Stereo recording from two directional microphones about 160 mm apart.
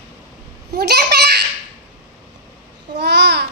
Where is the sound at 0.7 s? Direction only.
90° right.